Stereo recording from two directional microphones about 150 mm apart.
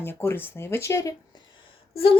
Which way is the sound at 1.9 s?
40° left (ahead or behind).